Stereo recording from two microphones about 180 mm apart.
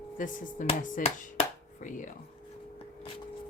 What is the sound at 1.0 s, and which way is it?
Chop, 40° left (ahead or behind).